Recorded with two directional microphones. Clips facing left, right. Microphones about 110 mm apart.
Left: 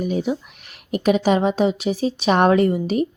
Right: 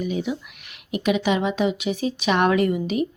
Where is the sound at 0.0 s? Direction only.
40° left (ahead or behind).